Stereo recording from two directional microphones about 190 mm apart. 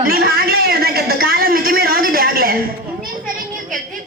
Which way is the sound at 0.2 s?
55° right (ahead or behind).